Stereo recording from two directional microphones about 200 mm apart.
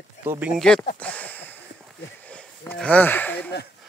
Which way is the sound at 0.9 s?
5° left (ahead or behind).